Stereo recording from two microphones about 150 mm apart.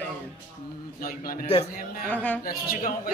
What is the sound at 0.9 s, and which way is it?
Speech, 70° left (ahead or behind).